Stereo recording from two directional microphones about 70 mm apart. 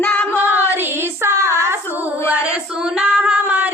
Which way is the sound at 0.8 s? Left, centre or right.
Right.